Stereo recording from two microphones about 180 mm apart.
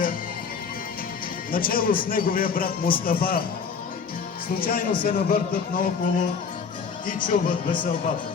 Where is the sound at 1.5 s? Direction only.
55° left (ahead or behind).